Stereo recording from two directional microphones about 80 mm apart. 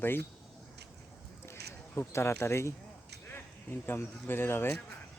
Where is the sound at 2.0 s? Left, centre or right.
Left.